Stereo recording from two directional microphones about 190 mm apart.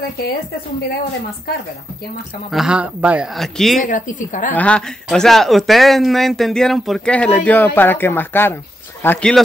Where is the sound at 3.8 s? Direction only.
45° left (ahead or behind).